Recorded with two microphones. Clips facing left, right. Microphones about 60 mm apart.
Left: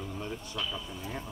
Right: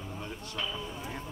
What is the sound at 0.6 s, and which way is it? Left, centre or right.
Speech, right.